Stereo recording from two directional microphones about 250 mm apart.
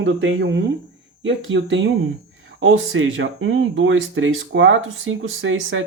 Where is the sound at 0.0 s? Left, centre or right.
Right.